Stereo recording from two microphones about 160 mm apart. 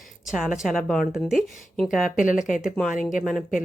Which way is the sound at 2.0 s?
55° left (ahead or behind).